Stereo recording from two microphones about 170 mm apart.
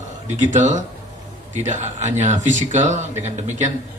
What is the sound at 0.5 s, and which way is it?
A man's voice, 45° right (ahead or behind).